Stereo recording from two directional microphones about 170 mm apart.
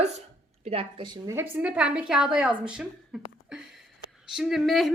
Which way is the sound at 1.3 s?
10° right (ahead or behind).